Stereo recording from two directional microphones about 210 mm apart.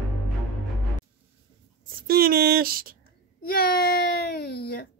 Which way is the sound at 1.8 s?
45° right (ahead or behind).